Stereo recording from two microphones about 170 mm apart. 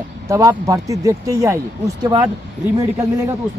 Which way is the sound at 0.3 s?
20° right (ahead or behind).